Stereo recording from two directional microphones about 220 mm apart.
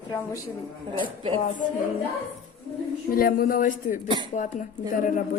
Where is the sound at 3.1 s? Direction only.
40° left (ahead or behind).